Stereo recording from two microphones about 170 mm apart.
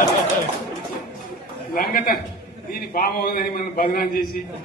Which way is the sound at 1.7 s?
60° left (ahead or behind).